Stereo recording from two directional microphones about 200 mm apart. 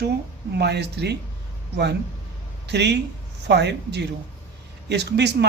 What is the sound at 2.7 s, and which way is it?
A man's voice, 60° right (ahead or behind).